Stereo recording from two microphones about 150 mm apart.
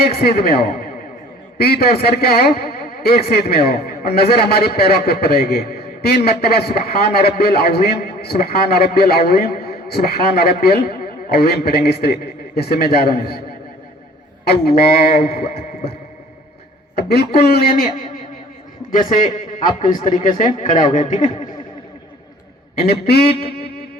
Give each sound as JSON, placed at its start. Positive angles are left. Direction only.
{"t": 0.0, "sound": "a man's voice", "side_deg": 90}
{"t": 14.4, "sound": "a man's voice", "side_deg": 90}
{"t": 17.0, "sound": "a man's voice", "side_deg": 90}
{"t": 21.2, "sound": "speech", "side_deg": 35}
{"t": 23.0, "sound": "music", "side_deg": 90}